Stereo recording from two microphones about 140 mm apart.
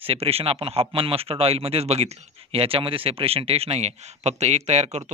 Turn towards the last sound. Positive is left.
turn(degrees=-50)  # may be behind; listen again after turning